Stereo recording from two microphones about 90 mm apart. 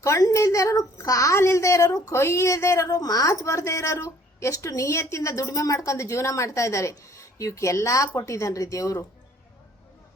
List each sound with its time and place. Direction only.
0.0 s a woman's voice: 40° left (ahead or behind)